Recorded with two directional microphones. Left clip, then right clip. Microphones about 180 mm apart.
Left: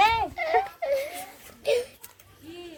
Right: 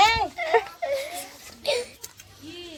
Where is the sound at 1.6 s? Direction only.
40° left (ahead or behind).